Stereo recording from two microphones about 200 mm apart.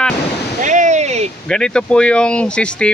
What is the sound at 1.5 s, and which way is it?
Speech, 5° left (ahead or behind).